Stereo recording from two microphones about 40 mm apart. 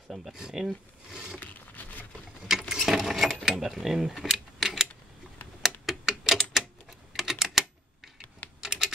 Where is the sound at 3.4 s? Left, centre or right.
Centre.